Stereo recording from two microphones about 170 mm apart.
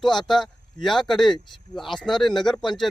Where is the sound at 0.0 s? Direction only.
Centre (ahead or behind).